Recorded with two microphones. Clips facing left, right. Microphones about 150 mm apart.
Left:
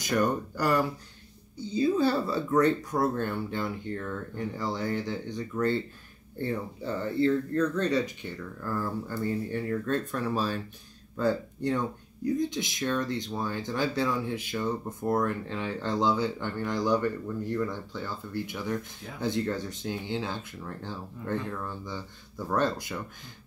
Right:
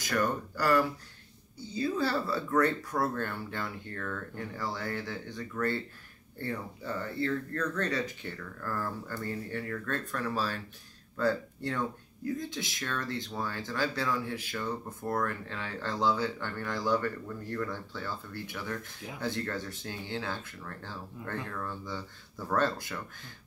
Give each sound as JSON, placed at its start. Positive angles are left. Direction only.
{"t": 0.0, "sound": "speech", "side_deg": 20}